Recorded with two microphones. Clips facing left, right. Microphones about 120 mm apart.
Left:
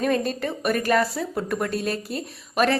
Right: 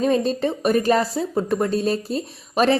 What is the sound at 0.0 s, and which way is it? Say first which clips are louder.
Speech: right 4 dB; 25° right (ahead or behind).